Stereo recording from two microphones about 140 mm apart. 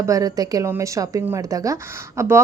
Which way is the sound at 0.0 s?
25° right (ahead or behind).